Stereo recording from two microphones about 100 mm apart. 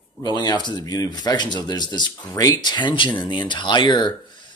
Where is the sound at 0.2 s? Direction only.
45° left (ahead or behind).